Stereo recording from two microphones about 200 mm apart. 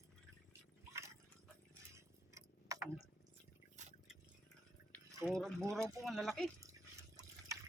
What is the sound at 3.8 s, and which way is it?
Drip, 35° right (ahead or behind).